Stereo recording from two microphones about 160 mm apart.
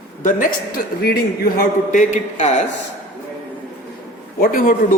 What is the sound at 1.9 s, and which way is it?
Speech, 50° left (ahead or behind).